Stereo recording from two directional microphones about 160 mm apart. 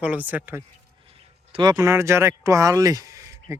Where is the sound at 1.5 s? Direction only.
25° right (ahead or behind).